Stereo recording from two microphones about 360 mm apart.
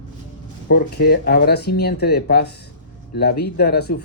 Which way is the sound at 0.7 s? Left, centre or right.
Left.